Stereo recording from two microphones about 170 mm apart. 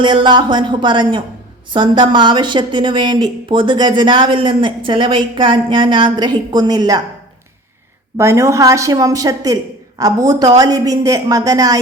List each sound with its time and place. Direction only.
0.0 s speech: 25° right (ahead or behind)
8.2 s speech: 15° right (ahead or behind)